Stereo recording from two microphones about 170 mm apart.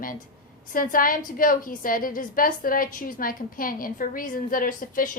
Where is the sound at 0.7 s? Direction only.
55° left (ahead or behind).